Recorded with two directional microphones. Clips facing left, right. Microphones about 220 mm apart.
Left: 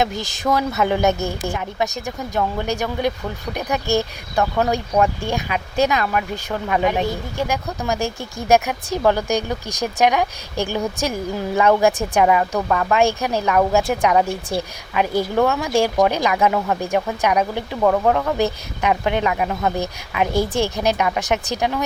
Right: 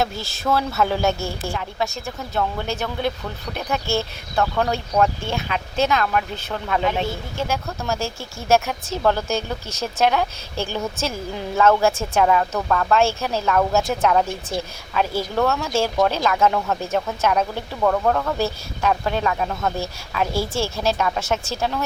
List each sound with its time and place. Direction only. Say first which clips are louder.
0.0 s speech: left 3 dB; 15° left (ahead or behind)